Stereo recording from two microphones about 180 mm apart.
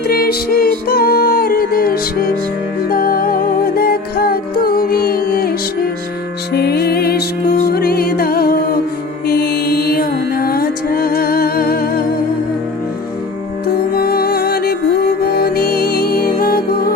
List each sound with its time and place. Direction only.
0.1 s music: 60° left (ahead or behind)
13.7 s music: 60° left (ahead or behind)